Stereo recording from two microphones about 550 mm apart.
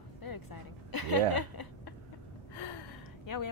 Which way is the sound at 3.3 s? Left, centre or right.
Left.